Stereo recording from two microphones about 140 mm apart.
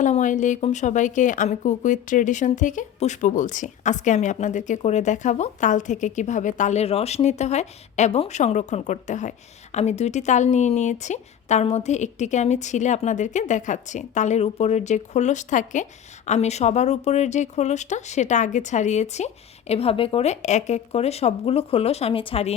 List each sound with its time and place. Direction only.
0.0 s a woman's voice: 60° left (ahead or behind); by 22.5 s 45° left (ahead or behind)